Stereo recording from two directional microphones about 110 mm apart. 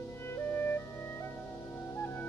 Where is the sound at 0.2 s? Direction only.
20° left (ahead or behind).